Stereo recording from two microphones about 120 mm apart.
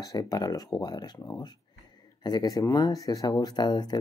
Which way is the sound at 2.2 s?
35° left (ahead or behind).